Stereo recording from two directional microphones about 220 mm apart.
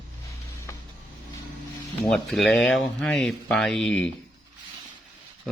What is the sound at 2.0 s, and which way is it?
Speech, centre (ahead or behind).